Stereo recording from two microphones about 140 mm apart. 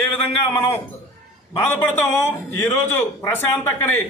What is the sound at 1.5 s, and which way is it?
A man's voice, 15° left (ahead or behind).